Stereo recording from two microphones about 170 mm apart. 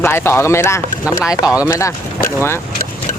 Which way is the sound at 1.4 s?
10° right (ahead or behind).